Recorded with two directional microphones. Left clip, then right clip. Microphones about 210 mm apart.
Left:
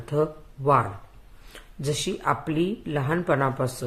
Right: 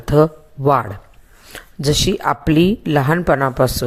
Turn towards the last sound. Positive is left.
turn(degrees=-40)  # may be behind; listen again after turning